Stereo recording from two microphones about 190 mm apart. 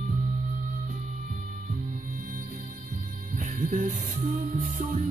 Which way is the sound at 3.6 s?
45° right (ahead or behind).